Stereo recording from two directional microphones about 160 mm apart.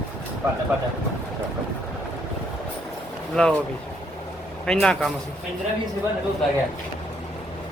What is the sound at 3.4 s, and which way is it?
Speech, 5° left (ahead or behind).